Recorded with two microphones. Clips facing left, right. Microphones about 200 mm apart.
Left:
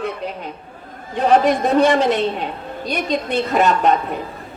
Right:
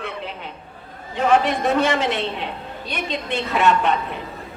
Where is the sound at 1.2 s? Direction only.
35° left (ahead or behind).